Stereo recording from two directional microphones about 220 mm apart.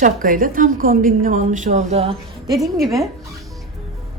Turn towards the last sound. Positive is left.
turn(degrees=0)  # may be behind; listen again after turning